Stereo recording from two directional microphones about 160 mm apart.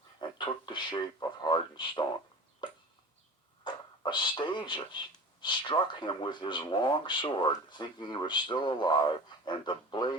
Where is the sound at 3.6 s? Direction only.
30° left (ahead or behind).